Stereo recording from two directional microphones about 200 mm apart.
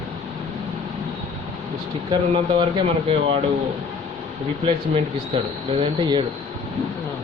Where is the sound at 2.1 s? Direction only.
25° right (ahead or behind).